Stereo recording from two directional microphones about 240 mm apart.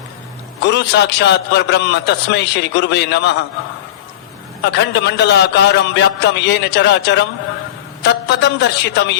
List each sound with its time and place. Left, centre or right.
0.7 s a man's voice: left
4.6 s a man's voice: left
8.4 s a man's voice: left